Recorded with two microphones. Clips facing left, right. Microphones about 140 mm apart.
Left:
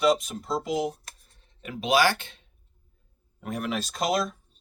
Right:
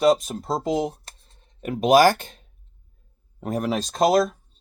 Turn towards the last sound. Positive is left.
turn(degrees=-45)  # may be behind; listen again after turning